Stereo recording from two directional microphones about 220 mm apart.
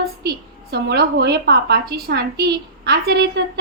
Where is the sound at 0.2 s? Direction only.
45° right (ahead or behind).